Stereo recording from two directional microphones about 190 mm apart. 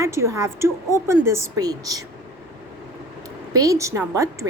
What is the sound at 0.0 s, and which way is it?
A woman's voice, 15° right (ahead or behind).